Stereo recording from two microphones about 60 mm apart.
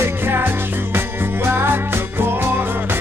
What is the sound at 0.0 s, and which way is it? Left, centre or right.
Music, right.